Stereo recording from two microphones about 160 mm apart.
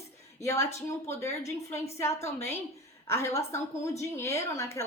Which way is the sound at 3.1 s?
15° left (ahead or behind).